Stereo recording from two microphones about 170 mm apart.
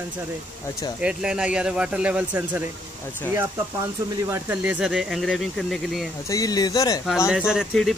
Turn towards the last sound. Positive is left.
turn(degrees=0)  # may be behind; listen again after turning